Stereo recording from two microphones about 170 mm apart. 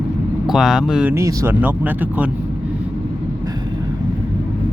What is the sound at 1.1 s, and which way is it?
Speech, 15° right (ahead or behind).